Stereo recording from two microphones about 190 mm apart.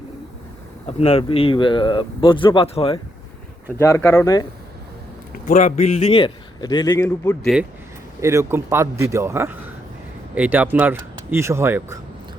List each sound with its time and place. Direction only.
0.9 s speech: 35° left (ahead or behind)
3.8 s speech: 15° left (ahead or behind)
5.3 s speech: 40° left (ahead or behind); by 7.3 s 15° left (ahead or behind)
7.4 s speech: 5° right (ahead or behind)
8.2 s speech: 15° right (ahead or behind)